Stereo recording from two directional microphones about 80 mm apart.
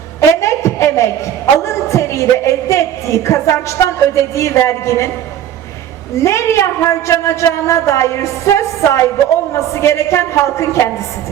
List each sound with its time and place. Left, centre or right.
0.2 s a sound: left
1.5 s speech: left
6.1 s a man's voice: left